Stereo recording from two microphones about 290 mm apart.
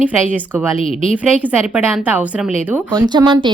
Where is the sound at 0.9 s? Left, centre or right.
Right.